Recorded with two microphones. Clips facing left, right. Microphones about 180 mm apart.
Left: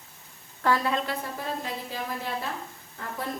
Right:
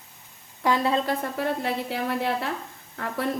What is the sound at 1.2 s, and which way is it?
Speech, 65° right (ahead or behind).